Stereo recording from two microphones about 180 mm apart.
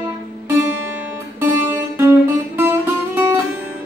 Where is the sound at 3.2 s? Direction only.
15° right (ahead or behind).